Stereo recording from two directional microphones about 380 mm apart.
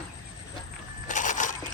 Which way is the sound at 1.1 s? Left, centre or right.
Centre.